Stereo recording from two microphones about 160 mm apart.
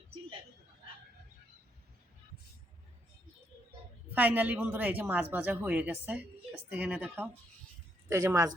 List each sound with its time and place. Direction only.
4.1 s speech: 10° right (ahead or behind)